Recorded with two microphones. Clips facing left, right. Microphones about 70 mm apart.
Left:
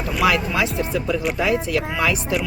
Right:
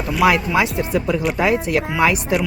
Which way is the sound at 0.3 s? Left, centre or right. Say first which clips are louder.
Right 3 dB; right.